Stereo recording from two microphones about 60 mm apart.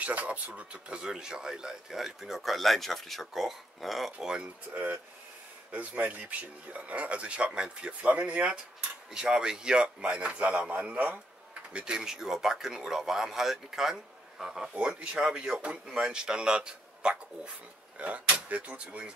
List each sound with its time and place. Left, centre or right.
0.0 s speech: right; by 4.3 s centre
4.3 s speech: right
11.7 s speech: centre
14.7 s speech: centre